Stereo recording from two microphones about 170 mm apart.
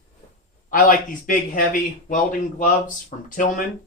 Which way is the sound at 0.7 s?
55° left (ahead or behind).